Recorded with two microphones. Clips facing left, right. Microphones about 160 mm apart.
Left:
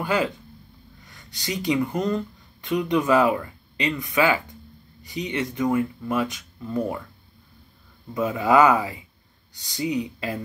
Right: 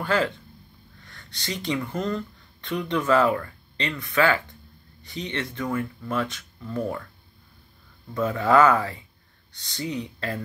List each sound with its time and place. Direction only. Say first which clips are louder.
0.0 s speech: even; 10° left (ahead or behind)
8.1 s speech: left 1 dB; 15° left (ahead or behind)